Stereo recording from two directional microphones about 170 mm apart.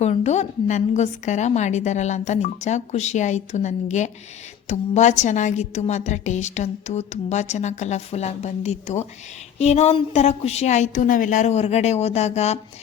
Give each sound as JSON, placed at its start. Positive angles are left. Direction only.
{"t": 0.0, "sound": "a woman's voice", "side_deg": 40}